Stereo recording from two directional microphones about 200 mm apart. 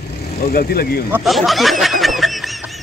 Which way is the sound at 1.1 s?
Centre (ahead or behind).